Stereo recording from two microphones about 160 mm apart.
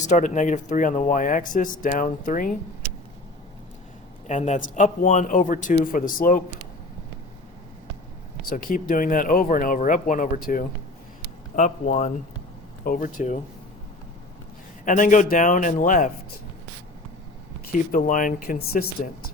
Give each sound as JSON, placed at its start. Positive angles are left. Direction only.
{"t": 0.1, "sound": "speech", "side_deg": 50}
{"t": 4.3, "sound": "speech", "side_deg": 50}
{"t": 8.4, "sound": "speech", "side_deg": 60}
{"t": 12.8, "sound": "speech", "side_deg": 60}
{"t": 14.8, "sound": "speech", "side_deg": 55}
{"t": 17.7, "sound": "speech", "side_deg": 55}